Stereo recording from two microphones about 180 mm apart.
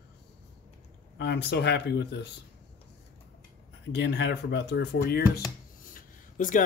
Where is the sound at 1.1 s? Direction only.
70° left (ahead or behind).